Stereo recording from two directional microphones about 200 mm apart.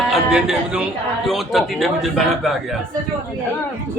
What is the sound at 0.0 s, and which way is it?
A man's voice, centre (ahead or behind).